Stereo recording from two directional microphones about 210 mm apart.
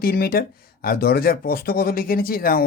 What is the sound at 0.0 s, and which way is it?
Speech, 45° left (ahead or behind).